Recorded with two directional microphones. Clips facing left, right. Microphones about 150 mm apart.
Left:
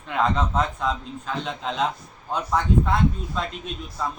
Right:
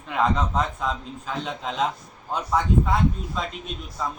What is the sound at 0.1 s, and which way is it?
A man's voice, centre (ahead or behind).